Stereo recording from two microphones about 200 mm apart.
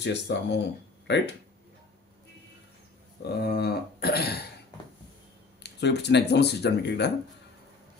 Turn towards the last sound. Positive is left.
turn(degrees=55)  # may be behind; listen again after turning